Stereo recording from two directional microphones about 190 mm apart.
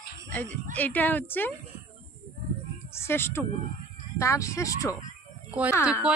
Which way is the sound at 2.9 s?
15° left (ahead or behind).